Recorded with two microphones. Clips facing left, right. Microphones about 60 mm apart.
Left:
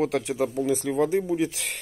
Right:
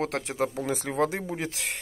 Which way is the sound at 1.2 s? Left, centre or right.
Right.